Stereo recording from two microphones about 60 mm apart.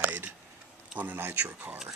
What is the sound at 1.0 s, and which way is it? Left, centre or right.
Speech, right.